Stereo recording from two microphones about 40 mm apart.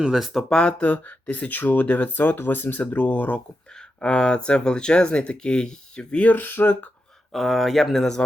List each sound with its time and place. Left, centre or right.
0.5 s speech: left
0.8 s speech: left
3.8 s speech: left
6.2 s speech: left
7.3 s speech: centre